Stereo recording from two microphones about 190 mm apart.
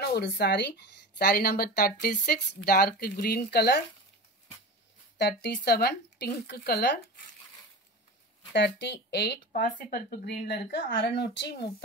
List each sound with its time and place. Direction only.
0.0 s speech: 60° left (ahead or behind)
1.1 s speech: 50° left (ahead or behind)
5.1 s speech: 65° left (ahead or behind)
8.5 s speech: 70° left (ahead or behind)
9.5 s speech: 40° left (ahead or behind); by 11.7 s 65° left (ahead or behind)